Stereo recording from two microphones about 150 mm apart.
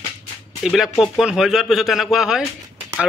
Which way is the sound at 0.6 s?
5° right (ahead or behind).